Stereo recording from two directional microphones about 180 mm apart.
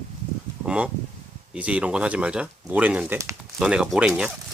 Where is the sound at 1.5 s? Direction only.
5° right (ahead or behind).